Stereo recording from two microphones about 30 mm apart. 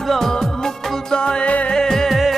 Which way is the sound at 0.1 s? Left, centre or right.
Centre.